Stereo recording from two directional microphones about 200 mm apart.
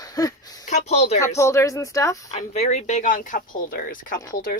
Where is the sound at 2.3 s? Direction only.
35° left (ahead or behind).